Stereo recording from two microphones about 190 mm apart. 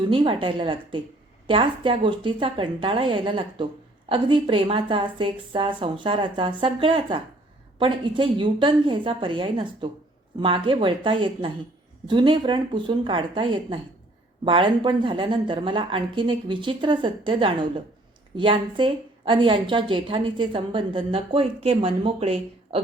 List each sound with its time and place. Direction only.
0.0 s a woman's voice: 25° right (ahead or behind)